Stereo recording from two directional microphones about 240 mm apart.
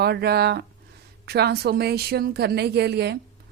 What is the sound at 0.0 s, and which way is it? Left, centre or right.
A woman's voice, right.